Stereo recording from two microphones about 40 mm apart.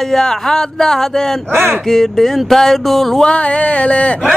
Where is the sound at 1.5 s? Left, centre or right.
Right.